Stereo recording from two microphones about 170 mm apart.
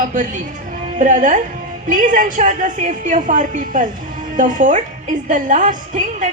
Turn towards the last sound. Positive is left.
turn(degrees=-45)  # may be behind; listen again after turning